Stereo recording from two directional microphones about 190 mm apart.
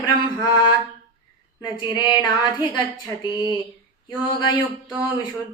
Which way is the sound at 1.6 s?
20° left (ahead or behind).